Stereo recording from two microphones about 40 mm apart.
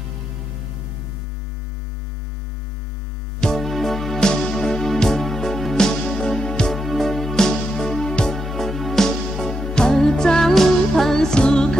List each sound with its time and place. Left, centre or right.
3.3 s music: centre
3.6 s music: centre
6.7 s music: centre
8.4 s music: centre